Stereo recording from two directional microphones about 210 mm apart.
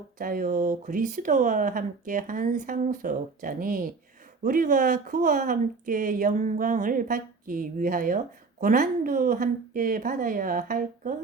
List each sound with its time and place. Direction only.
0.2 s speech: 40° right (ahead or behind)